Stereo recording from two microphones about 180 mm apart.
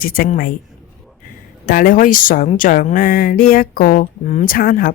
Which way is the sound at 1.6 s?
50° left (ahead or behind).